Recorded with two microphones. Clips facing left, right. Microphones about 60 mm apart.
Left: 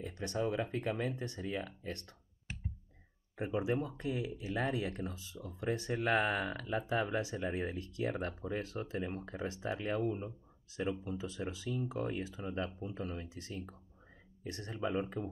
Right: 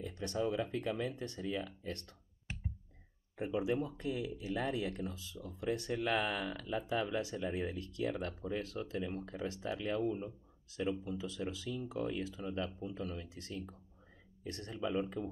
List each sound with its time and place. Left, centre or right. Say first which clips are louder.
0.0 s speech: even; left
1.1 s speech: even; left
3.3 s speech: even; left